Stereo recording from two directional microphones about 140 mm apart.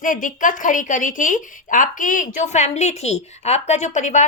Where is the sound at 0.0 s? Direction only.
70° left (ahead or behind).